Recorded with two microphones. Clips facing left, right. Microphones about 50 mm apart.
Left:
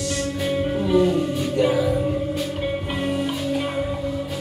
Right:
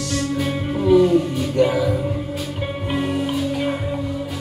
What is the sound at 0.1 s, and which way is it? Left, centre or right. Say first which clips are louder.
Music: right 2 dB; centre.